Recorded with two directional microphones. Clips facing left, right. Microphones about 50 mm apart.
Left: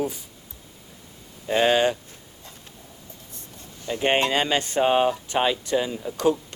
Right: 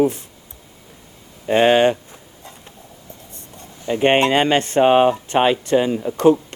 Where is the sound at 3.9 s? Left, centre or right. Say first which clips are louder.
Right 7 dB; right.